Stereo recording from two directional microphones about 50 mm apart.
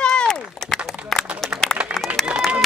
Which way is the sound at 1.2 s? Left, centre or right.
Centre.